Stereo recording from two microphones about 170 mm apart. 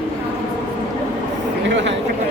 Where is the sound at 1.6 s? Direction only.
90° right.